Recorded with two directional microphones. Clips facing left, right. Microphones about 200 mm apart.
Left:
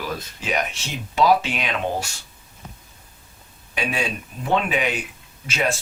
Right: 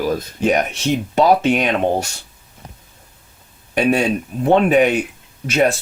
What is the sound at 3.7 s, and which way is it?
Speech, 50° right (ahead or behind).